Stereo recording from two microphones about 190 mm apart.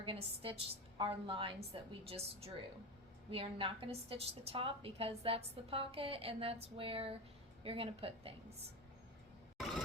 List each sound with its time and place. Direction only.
0.0 s a woman's voice: 30° right (ahead or behind)